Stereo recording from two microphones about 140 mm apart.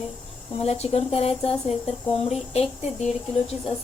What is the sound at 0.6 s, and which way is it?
A woman's voice, 45° left (ahead or behind).